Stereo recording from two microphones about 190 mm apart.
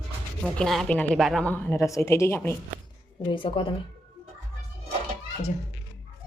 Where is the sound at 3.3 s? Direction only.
30° left (ahead or behind).